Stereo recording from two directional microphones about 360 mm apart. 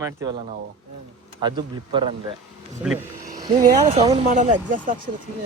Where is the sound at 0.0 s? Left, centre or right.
Centre.